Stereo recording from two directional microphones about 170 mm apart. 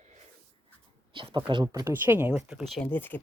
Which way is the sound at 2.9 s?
10° left (ahead or behind).